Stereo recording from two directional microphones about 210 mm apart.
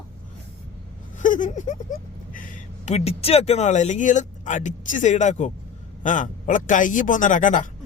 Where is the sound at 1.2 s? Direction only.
35° left (ahead or behind).